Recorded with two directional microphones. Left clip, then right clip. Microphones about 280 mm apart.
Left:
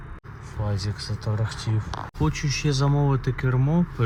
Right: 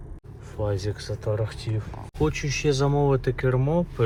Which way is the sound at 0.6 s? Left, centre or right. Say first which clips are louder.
Right 4 dB; centre.